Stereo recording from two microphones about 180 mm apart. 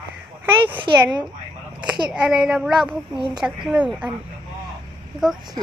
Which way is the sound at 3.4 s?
10° right (ahead or behind).